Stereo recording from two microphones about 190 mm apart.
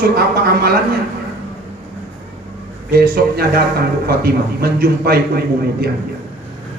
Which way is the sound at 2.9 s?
55° right (ahead or behind).